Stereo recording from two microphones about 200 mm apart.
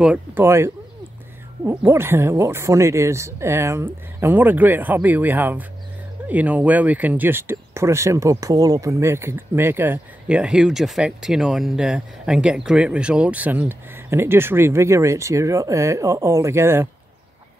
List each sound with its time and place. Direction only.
0.0 s speech: 10° right (ahead or behind)